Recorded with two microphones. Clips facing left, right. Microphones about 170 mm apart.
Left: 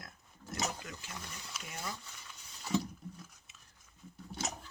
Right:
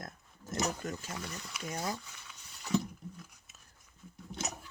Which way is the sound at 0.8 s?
45° right (ahead or behind).